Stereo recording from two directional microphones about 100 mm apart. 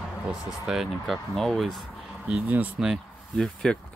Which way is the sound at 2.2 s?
10° right (ahead or behind).